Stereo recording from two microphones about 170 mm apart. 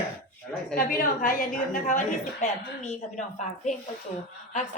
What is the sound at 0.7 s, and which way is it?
A woman's voice, 50° left (ahead or behind).